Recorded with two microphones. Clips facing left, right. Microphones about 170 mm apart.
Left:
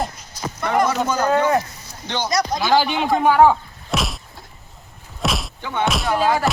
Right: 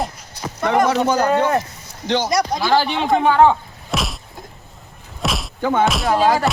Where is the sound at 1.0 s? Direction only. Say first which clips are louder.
Right 3 dB; 35° right (ahead or behind).